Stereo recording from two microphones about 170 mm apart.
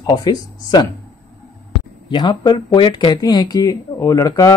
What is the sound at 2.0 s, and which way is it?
Speech, 25° left (ahead or behind).